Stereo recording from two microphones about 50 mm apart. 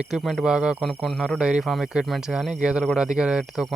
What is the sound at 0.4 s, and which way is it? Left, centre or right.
Speech, centre.